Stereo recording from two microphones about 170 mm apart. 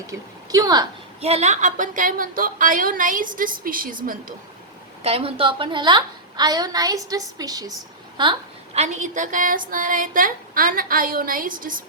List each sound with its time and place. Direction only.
0.1 s a woman's voice: 20° right (ahead or behind)
1.2 s a woman's voice: 40° right (ahead or behind)
5.0 s a woman's voice: 35° right (ahead or behind)
8.2 s a woman's voice: 35° right (ahead or behind); by 11.5 s 55° right (ahead or behind)